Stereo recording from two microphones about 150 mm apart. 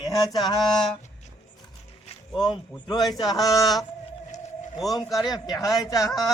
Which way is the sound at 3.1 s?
25° left (ahead or behind).